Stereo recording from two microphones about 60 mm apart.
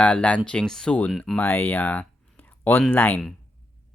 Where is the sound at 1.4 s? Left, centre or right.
Left.